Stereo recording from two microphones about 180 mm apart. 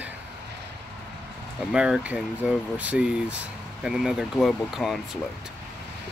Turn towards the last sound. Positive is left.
turn(degrees=0)  # may be behind; listen again after turning